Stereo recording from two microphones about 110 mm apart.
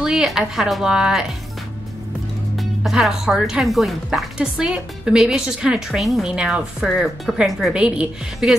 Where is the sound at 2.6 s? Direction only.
Centre (ahead or behind).